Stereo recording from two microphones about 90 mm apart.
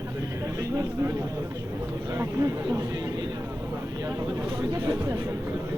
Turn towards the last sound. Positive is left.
turn(degrees=-40)  # may be behind; listen again after turning